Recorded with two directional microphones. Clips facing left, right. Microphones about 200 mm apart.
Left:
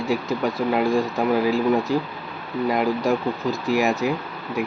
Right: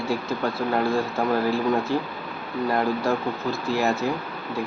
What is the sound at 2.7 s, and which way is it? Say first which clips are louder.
Speech: left 2 dB; 15° left (ahead or behind).